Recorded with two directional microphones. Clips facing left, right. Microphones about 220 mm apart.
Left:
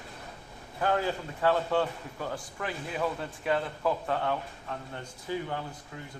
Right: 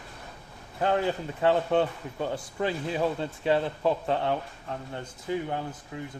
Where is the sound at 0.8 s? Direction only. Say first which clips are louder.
Right 3 dB; 20° right (ahead or behind).